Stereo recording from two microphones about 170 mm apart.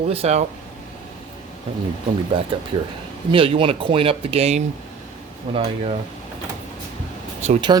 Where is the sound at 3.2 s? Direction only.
30° right (ahead or behind).